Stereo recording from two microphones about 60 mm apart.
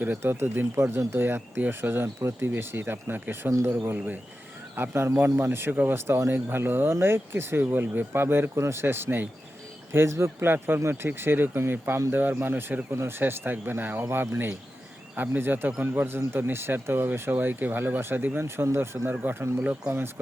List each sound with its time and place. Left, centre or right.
0.2 s speech: right
9.9 s speech: right
19.1 s speech: right